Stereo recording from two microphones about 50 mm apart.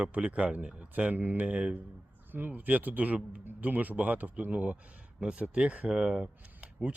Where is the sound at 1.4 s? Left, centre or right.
Right.